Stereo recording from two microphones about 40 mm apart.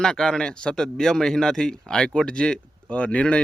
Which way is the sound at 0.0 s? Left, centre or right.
Centre.